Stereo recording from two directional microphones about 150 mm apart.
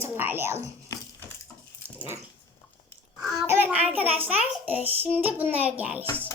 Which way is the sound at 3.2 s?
Centre (ahead or behind).